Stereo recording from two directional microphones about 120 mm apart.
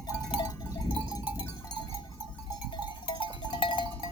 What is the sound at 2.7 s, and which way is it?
Sheep, 40° left (ahead or behind).